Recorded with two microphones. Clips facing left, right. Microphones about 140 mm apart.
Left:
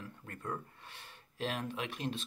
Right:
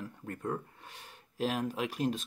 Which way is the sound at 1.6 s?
40° right (ahead or behind).